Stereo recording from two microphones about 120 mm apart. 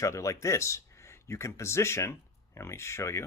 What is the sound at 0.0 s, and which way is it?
Speech, 25° left (ahead or behind).